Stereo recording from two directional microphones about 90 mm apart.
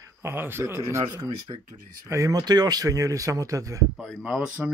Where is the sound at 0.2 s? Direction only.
25° right (ahead or behind).